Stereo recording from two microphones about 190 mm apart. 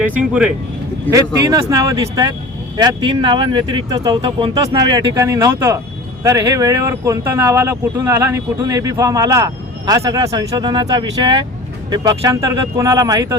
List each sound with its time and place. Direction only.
0.0 s speech: 5° right (ahead or behind)